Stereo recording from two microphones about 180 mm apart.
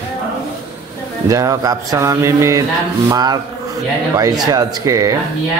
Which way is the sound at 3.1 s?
20° right (ahead or behind).